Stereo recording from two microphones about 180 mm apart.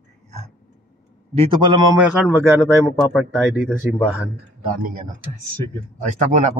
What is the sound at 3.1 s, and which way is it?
Speech, 5° right (ahead or behind).